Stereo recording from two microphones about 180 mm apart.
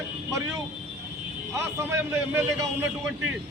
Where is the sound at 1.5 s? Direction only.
15° right (ahead or behind).